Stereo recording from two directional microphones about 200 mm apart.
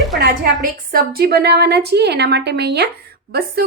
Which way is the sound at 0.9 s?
45° right (ahead or behind).